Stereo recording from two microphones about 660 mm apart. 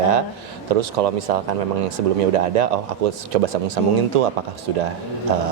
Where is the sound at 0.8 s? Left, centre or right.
Right.